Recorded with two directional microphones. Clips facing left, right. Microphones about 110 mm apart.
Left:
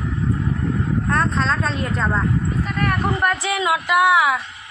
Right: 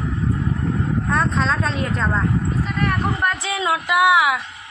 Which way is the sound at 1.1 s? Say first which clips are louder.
Even; 5° right (ahead or behind).